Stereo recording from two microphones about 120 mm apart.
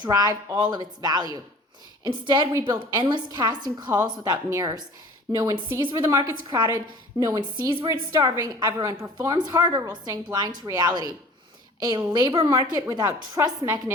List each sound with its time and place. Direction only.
0.0 s a woman's voice: 30° right (ahead or behind)